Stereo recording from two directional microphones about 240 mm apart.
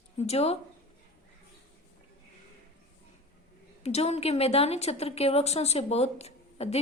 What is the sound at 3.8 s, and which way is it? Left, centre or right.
A woman's voice, left.